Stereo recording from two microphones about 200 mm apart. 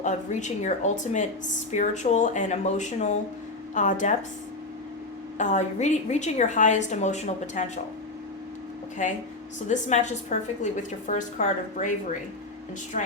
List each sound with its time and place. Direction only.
0.0 s a woman's voice: 35° left (ahead or behind)
5.4 s a woman's voice: 35° left (ahead or behind)
9.0 s a woman's voice: 40° left (ahead or behind)